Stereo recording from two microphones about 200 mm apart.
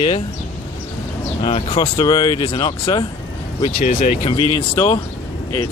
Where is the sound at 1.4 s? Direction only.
30° left (ahead or behind).